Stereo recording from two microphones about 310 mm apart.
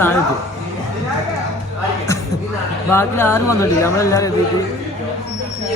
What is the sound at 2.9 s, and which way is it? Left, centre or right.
Speech, centre.